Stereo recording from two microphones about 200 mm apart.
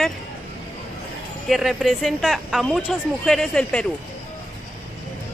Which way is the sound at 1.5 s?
Centre (ahead or behind).